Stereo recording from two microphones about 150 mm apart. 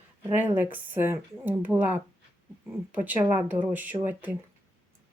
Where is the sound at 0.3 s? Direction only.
15° right (ahead or behind).